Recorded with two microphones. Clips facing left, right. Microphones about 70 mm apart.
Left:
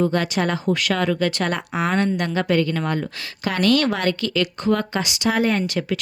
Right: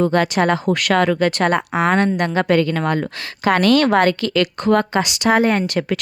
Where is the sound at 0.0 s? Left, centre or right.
Right.